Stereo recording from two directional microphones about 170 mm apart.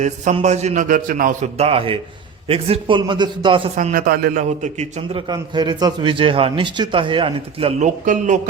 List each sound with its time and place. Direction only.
0.3 s a man's voice: 40° right (ahead or behind)
3.8 s a man's voice: 50° right (ahead or behind)
4.4 s a man's voice: 40° right (ahead or behind)
5.3 s speech: 25° right (ahead or behind)
7.8 s a man's voice: 50° right (ahead or behind)